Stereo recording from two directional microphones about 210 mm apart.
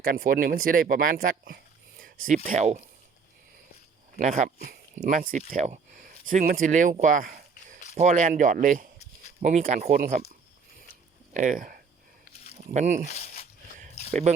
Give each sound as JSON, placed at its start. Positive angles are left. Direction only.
{"t": 0.0, "sound": "speech", "side_deg": -45}
{"t": 4.2, "sound": "speech", "side_deg": -35}
{"t": 11.3, "sound": "speech", "side_deg": -40}
{"t": 12.3, "sound": "a sound", "side_deg": 30}
{"t": 12.7, "sound": "speech", "side_deg": -35}
{"t": 13.1, "sound": "speech", "side_deg": 30}
{"t": 14.1, "sound": "speech", "side_deg": -35}